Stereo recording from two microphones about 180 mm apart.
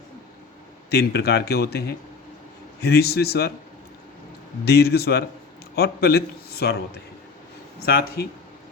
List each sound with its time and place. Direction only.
0.9 s a man's voice: 65° left (ahead or behind)
4.6 s a man's voice: 65° left (ahead or behind)